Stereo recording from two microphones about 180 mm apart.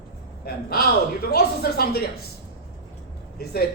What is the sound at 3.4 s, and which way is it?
Speech, 60° left (ahead or behind).